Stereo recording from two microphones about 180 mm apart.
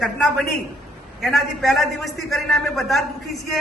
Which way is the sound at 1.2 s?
Centre (ahead or behind).